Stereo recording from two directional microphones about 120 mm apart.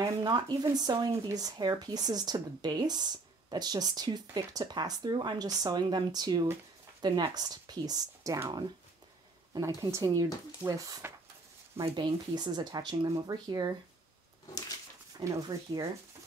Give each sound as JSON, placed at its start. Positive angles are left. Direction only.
{"t": 0.2, "sound": "speech", "side_deg": -40}
{"t": 9.8, "sound": "speech", "side_deg": -25}
{"t": 11.7, "sound": "speech", "side_deg": -45}
{"t": 15.1, "sound": "speech", "side_deg": -30}